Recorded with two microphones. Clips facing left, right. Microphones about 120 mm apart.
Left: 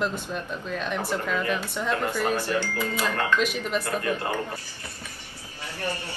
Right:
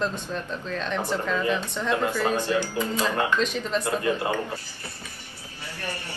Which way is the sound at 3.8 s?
20° right (ahead or behind).